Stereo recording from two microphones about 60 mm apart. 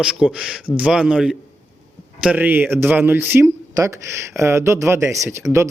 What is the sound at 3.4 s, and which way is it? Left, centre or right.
Speech, right.